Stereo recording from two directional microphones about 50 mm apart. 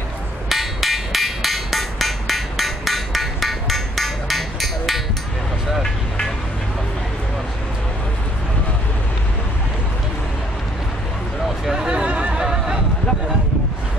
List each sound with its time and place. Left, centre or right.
0.5 s hammer: centre
5.8 s vehicle: centre
11.4 s hubbub: centre
12.1 s a sound: right